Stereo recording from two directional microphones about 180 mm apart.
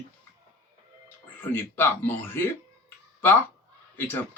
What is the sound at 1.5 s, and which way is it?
Speech, 10° left (ahead or behind).